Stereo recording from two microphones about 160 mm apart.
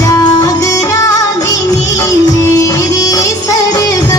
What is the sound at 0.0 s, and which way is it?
Music, 20° left (ahead or behind).